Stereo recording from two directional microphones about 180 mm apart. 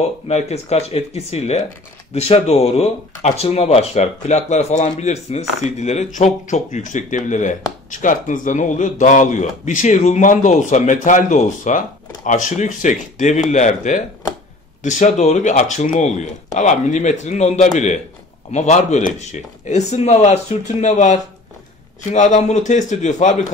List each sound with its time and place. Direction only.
0.3 s speech: 35° left (ahead or behind)